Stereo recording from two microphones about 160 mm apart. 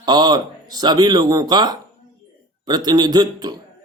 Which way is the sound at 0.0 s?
25° right (ahead or behind).